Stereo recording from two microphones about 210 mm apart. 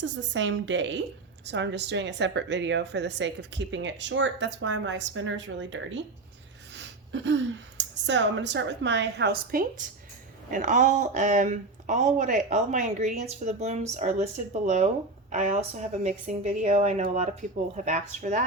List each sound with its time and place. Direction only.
0.0 s a woman's voice: 60° right (ahead or behind); by 18.4 s 35° right (ahead or behind)